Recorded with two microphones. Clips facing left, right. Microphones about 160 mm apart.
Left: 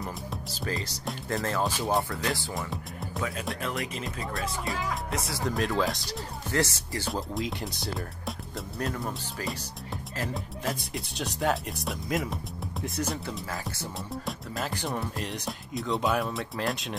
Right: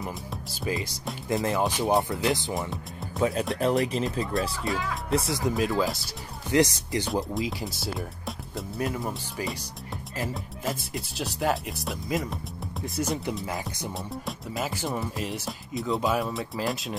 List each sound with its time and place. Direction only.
0.0 s music: 10° right (ahead or behind)
1.4 s speech: 15° right (ahead or behind); by 4.0 s 35° right (ahead or behind)
5.1 s speech: 30° right (ahead or behind)
5.4 s speech: centre (ahead or behind)
6.5 s speech: 15° right (ahead or behind)
7.3 s speech: centre (ahead or behind)
13.5 s speech: 15° right (ahead or behind)
14.2 s speech: 5° right (ahead or behind)